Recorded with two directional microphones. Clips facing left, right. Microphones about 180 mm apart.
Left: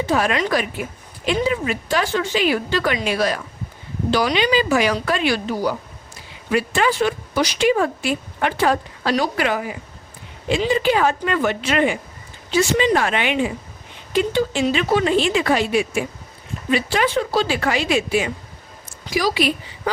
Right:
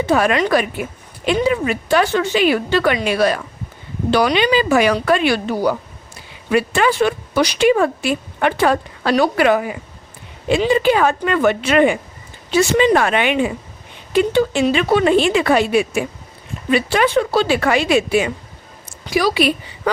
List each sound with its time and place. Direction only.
0.1 s speech: 60° right (ahead or behind)